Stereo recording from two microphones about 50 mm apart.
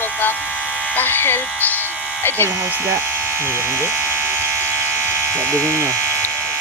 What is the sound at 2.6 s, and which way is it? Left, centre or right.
Speech, right.